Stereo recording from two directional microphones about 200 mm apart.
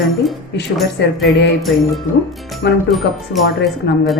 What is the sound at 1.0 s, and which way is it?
Music, 55° left (ahead or behind).